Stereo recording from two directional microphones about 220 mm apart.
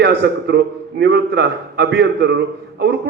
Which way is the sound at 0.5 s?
50° right (ahead or behind).